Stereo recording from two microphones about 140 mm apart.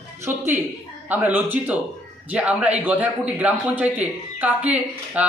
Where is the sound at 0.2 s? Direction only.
15° right (ahead or behind).